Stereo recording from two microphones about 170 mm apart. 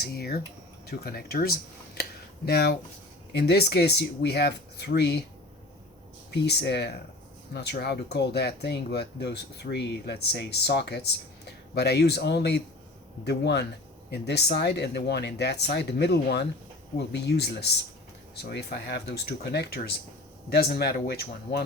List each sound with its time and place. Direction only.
0.0 s speech: 65° left (ahead or behind); by 5.2 s 80° left
6.3 s speech: 80° left